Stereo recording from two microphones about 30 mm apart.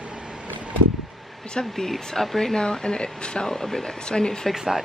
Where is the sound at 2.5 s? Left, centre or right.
Left.